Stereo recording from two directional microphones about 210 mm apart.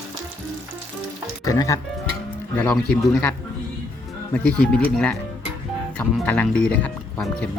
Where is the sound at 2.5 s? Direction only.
5° left (ahead or behind).